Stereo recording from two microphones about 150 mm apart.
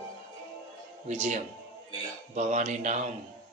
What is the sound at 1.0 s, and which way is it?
Speech, 50° right (ahead or behind).